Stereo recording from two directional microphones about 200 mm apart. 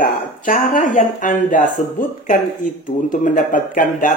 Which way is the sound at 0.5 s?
40° left (ahead or behind).